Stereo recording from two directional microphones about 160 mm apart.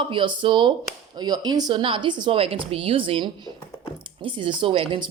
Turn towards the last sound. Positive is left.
turn(degrees=-35)  # may be behind; listen again after turning